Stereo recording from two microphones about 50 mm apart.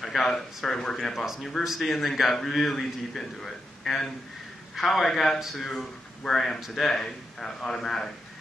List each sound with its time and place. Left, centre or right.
0.0 s speech: centre
1.1 s a man's voice: centre
5.4 s a man's voice: centre
5.7 s speech: centre